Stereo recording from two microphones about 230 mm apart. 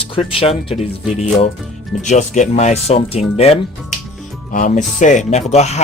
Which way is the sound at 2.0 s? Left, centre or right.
Left.